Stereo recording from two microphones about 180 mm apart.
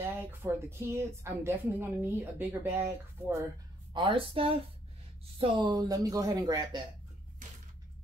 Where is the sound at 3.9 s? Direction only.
30° right (ahead or behind).